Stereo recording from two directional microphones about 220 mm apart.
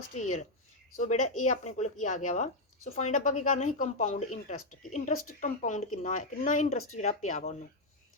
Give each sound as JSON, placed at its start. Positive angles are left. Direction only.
{"t": 0.9, "sound": "speech", "side_deg": 35}